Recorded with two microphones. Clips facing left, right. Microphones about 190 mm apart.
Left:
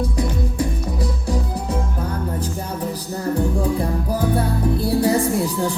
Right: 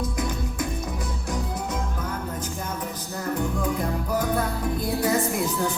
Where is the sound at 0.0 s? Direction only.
35° left (ahead or behind).